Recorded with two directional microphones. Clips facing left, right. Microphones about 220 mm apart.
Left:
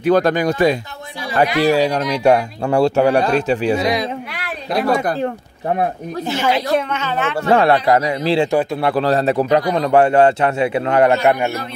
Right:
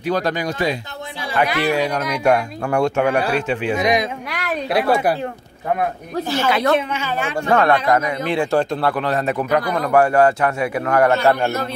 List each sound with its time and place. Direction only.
0.0 s speech: 55° left (ahead or behind)
1.3 s speech: 35° left (ahead or behind)
3.8 s speech: 15° right (ahead or behind)
4.3 s a sound: 45° right (ahead or behind)
4.7 s speech: 5° right (ahead or behind)
5.8 s a man's voice: 20° left (ahead or behind)
6.9 s speech: 10° right (ahead or behind)
7.4 s a man's voice: 30° left (ahead or behind)
8.5 s speech: 15° left (ahead or behind)
8.9 s a man's voice: 35° left (ahead or behind)